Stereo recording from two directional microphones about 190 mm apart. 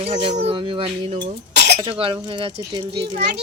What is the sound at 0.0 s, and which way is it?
Speech, 30° right (ahead or behind).